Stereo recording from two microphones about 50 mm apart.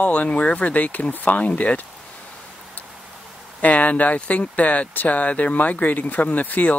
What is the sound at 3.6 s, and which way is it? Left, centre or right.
Speech, left.